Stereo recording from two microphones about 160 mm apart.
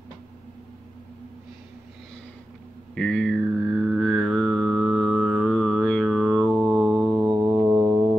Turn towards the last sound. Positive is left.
turn(degrees=-15)  # may be behind; listen again after turning